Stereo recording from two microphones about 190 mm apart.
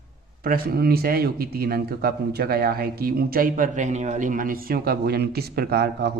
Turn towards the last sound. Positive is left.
turn(degrees=-55)  # may be behind; listen again after turning